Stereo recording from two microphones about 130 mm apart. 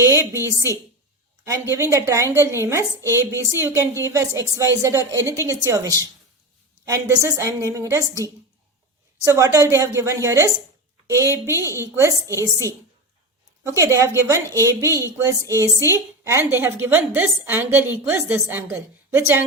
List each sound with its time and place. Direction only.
0.1 s a woman's voice: 20° right (ahead or behind)
1.5 s a woman's voice: 20° right (ahead or behind)
13.7 s a woman's voice: 20° right (ahead or behind)